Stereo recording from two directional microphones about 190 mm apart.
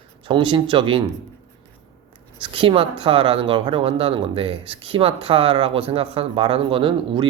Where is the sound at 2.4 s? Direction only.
25° right (ahead or behind).